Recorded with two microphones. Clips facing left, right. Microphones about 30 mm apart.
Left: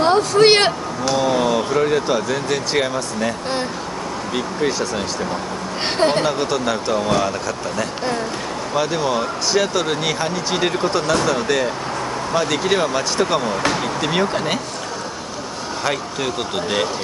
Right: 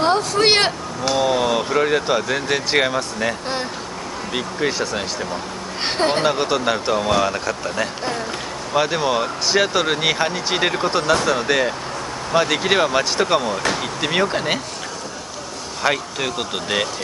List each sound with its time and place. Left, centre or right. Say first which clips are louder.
0.0 s speech: left 3 dB; centre
1.0 s speech: even; centre
6.3 s speech: right 1 dB; centre
15.8 s speech: right 2 dB; centre